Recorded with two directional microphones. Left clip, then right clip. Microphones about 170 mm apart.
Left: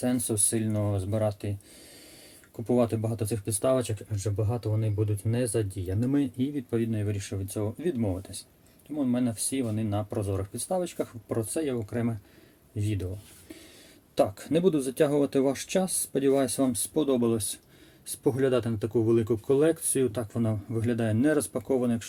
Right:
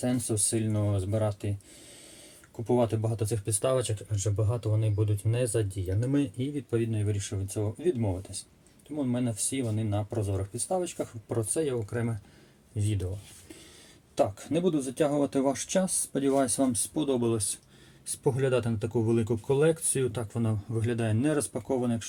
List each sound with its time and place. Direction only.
0.0 s speech: 25° left (ahead or behind)
2.6 s speech: 20° left (ahead or behind)
9.1 s speech: 30° left (ahead or behind); by 13.1 s 10° left (ahead or behind)
14.2 s speech: 30° left (ahead or behind)